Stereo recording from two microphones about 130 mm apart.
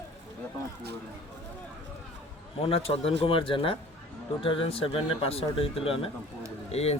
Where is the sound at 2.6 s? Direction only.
50° left (ahead or behind).